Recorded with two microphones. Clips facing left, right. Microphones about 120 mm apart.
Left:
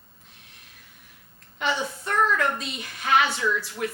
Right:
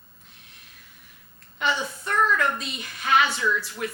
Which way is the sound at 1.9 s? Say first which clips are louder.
Even; 35° left (ahead or behind).